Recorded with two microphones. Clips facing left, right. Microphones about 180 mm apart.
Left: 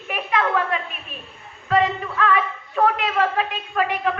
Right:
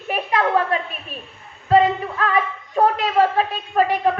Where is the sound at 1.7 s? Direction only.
35° right (ahead or behind).